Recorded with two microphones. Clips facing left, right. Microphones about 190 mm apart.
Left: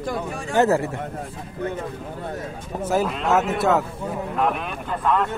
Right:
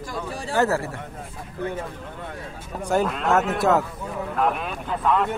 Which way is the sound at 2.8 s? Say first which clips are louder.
Even; centre (ahead or behind).